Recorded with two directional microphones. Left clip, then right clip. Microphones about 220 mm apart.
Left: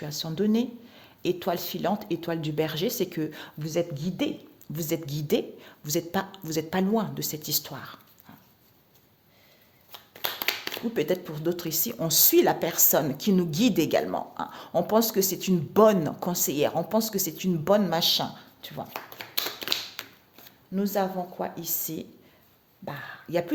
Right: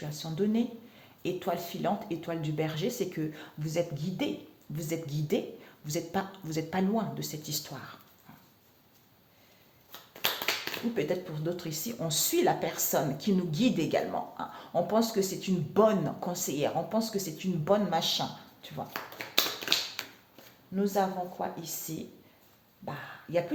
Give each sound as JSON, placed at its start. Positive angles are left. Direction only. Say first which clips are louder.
{"t": 0.0, "sound": "speech", "louder": "left 4 dB", "side_deg": 50}
{"t": 10.9, "sound": "speech", "louder": "left 6 dB", "side_deg": 50}
{"t": 19.3, "sound": "tap", "louder": "right 2 dB", "side_deg": 30}
{"t": 20.0, "sound": "a sound", "louder": "even", "side_deg": 10}
{"t": 20.7, "sound": "speech", "louder": "left 2 dB", "side_deg": 50}